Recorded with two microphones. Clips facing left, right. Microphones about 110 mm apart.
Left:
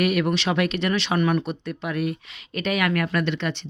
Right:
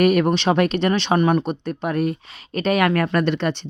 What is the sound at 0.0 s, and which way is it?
Speech, 40° right (ahead or behind).